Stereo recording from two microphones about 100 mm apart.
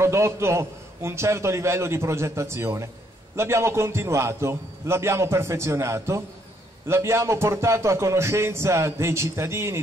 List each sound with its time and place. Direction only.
0.0 s a man's voice: 25° right (ahead or behind)